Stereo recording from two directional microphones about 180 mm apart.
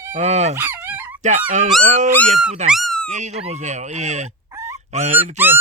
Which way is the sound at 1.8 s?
40° right (ahead or behind).